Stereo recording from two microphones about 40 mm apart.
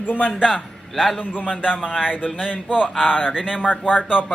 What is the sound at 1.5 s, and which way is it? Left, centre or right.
Speech, centre.